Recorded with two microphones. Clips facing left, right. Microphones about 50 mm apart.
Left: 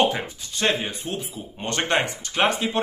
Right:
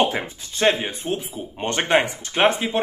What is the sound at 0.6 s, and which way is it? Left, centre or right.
A man's voice, centre.